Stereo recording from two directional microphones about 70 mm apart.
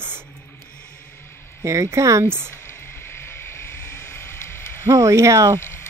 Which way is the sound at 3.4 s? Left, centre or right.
Left.